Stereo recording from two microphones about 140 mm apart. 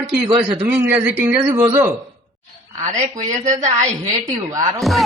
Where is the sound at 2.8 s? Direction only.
55° right (ahead or behind).